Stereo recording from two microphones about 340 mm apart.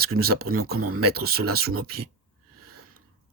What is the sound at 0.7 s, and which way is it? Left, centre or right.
Speech, right.